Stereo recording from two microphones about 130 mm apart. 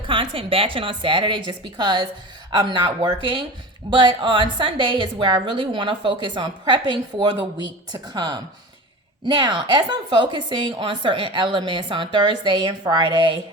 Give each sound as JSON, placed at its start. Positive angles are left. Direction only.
{"t": 0.1, "sound": "a woman's voice", "side_deg": -40}